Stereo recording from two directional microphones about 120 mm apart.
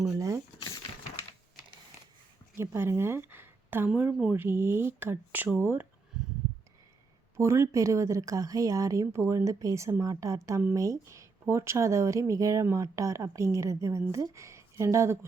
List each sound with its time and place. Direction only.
0.1 s speech: 25° right (ahead or behind)
2.6 s a woman's voice: 20° right (ahead or behind)
3.8 s speech: 10° right (ahead or behind)
6.1 s a sound: 5° right (ahead or behind)
7.3 s speech: 25° right (ahead or behind)